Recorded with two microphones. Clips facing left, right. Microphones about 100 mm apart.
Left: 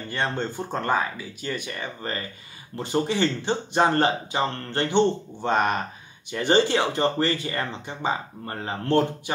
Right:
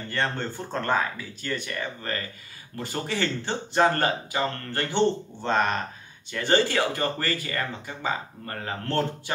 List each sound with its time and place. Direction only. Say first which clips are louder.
0.1 s speech: left 1 dB; 15° left (ahead or behind)